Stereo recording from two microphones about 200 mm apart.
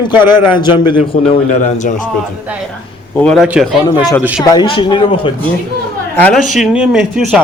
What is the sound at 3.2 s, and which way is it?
Speech, centre (ahead or behind).